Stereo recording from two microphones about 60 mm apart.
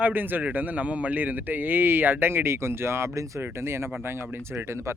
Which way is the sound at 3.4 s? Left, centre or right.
Right.